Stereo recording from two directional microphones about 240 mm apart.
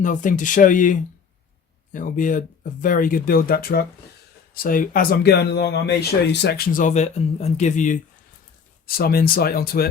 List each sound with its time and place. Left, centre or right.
0.0 s speech: left